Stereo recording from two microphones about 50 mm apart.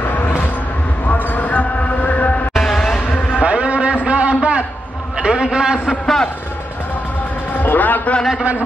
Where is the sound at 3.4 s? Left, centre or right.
Right.